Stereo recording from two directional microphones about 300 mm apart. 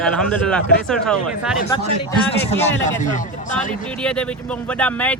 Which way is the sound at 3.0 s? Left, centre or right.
Left.